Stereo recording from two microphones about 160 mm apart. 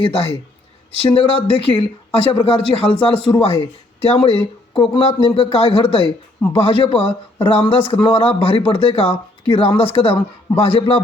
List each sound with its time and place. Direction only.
0.0 s speech: 35° left (ahead or behind)